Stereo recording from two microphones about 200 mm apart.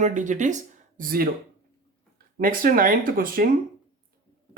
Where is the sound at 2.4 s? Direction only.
45° right (ahead or behind).